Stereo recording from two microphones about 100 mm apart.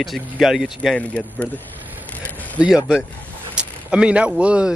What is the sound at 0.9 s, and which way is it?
Speech, 15° left (ahead or behind).